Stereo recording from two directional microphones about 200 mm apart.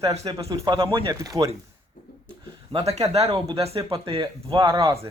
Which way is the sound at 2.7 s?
30° right (ahead or behind).